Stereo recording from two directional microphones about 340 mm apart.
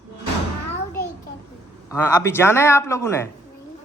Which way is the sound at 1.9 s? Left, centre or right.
Centre.